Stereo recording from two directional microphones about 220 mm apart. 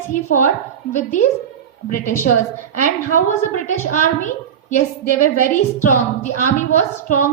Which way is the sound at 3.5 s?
35° left (ahead or behind).